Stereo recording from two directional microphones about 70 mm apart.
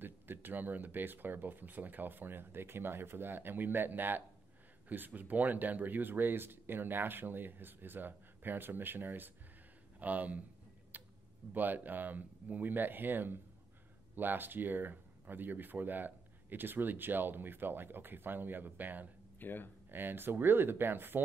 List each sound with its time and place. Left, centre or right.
0.0 s speech: right
10.9 s a sound: right
11.5 s speech: right
19.4 s speech: left
19.9 s speech: right